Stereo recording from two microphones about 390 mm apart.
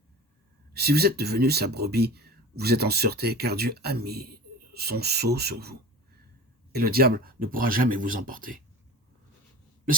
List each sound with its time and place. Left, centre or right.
0.7 s speech: right
6.7 s speech: right